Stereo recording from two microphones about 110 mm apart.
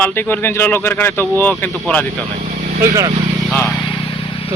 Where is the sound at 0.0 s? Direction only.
20° left (ahead or behind).